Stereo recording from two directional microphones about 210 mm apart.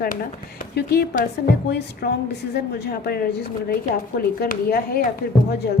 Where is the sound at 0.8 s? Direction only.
50° left (ahead or behind).